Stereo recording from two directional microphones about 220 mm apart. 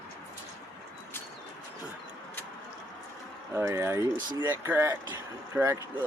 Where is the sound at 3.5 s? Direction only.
15° right (ahead or behind).